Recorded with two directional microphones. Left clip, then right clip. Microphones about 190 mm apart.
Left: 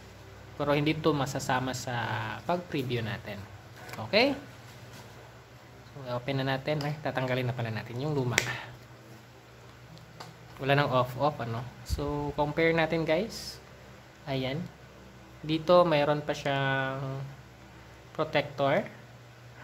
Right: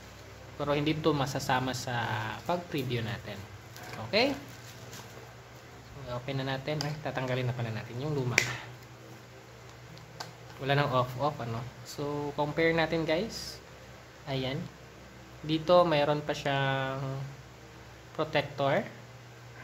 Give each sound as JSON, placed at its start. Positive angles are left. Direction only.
{"t": 0.6, "sound": "speech", "side_deg": 20}
{"t": 6.0, "sound": "speech", "side_deg": 25}
{"t": 10.6, "sound": "speech", "side_deg": 20}